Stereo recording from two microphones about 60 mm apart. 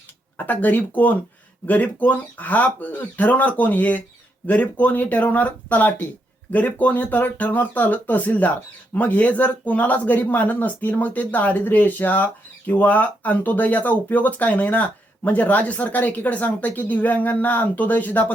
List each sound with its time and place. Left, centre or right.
0.3 s speech: left